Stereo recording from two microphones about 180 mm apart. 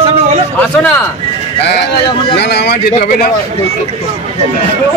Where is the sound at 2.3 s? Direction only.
65° left (ahead or behind).